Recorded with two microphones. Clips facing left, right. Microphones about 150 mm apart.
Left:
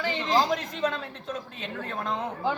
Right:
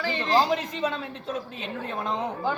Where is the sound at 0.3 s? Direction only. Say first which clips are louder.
Right 2 dB; 10° right (ahead or behind).